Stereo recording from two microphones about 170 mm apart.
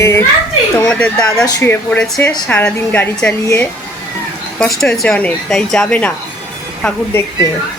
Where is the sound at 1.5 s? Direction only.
20° left (ahead or behind).